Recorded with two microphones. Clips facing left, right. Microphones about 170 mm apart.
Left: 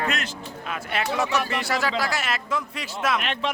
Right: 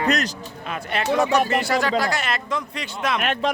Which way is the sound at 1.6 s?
Centre (ahead or behind).